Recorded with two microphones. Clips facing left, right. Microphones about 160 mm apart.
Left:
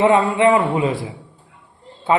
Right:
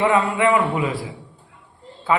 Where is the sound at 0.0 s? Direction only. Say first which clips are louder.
Left 4 dB; 25° left (ahead or behind).